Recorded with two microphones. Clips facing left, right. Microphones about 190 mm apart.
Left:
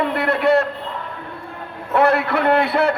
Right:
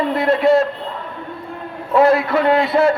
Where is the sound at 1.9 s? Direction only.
65° left (ahead or behind).